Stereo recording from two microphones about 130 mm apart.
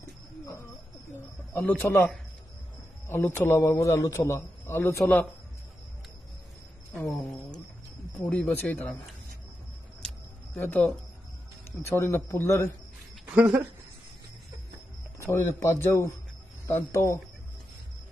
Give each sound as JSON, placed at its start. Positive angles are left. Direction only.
{"t": 1.1, "sound": "a man's voice", "side_deg": 20}
{"t": 7.1, "sound": "a man's voice", "side_deg": 5}
{"t": 10.0, "sound": "a sound", "side_deg": 15}
{"t": 11.9, "sound": "a man's voice", "side_deg": 20}
{"t": 13.2, "sound": "speech", "side_deg": -10}
{"t": 15.3, "sound": "a man's voice", "side_deg": 20}